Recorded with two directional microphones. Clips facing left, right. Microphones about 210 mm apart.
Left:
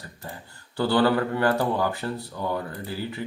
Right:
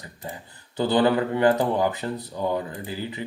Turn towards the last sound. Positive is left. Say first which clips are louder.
# even
turn(degrees=-15)  # may be behind; listen again after turning